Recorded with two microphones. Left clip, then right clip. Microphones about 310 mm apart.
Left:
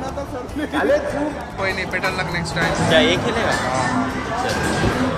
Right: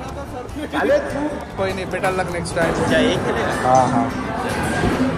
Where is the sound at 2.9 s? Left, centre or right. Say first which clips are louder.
Left 2 dB; left.